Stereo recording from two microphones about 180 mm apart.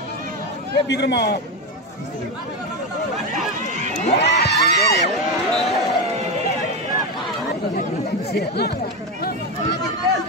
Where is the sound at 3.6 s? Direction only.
40° right (ahead or behind).